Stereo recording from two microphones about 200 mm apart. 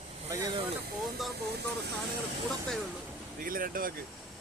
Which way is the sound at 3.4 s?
45° right (ahead or behind).